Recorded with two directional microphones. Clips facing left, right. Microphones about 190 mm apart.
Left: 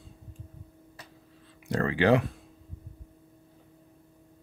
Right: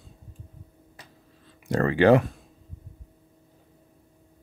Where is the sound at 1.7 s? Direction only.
50° right (ahead or behind).